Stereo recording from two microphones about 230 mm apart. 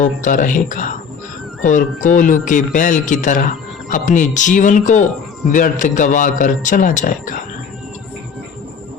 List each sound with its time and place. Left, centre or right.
0.0 s speech: left
2.0 s speech: left